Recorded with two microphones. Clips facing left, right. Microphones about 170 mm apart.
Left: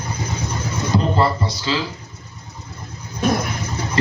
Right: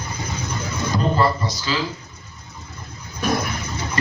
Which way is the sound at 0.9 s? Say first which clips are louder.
Left 1 dB; 25° left (ahead or behind).